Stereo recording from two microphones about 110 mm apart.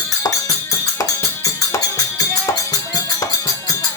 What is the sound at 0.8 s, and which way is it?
Music, 35° left (ahead or behind).